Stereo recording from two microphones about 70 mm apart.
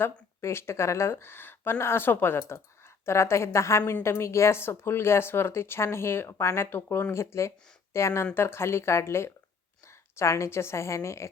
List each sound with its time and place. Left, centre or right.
0.0 s a woman's voice: left